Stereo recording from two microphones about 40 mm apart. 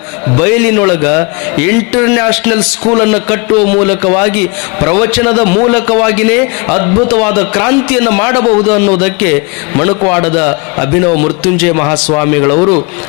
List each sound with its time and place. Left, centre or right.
0.3 s a man's voice: centre
6.7 s a man's voice: centre